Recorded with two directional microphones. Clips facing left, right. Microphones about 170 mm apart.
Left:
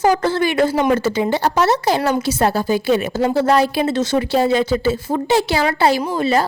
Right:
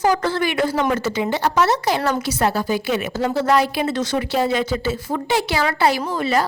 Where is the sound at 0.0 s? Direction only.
25° left (ahead or behind).